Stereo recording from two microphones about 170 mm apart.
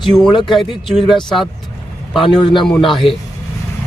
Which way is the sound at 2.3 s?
25° left (ahead or behind).